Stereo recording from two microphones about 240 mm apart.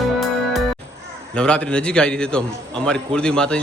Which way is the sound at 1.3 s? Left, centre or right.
Centre.